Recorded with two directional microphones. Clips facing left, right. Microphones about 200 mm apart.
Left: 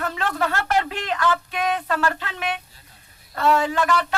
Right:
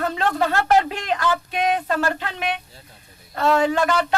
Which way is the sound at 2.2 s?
20° right (ahead or behind).